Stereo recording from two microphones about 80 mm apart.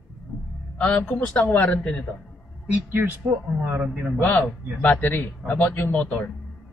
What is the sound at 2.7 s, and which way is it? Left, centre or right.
A man's voice, right.